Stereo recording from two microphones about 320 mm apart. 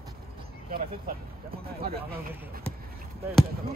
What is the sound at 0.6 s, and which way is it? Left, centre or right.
Vehicle, right.